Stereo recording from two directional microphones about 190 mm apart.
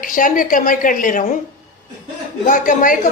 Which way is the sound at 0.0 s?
45° left (ahead or behind).